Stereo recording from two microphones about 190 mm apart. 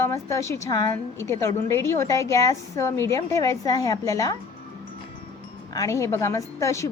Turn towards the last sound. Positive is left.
turn(degrees=15)  # may be behind; listen again after turning